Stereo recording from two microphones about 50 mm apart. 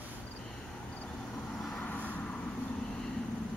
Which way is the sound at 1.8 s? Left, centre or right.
Left.